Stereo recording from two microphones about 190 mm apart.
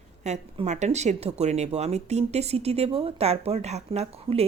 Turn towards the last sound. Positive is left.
turn(degrees=-35)  # may be behind; listen again after turning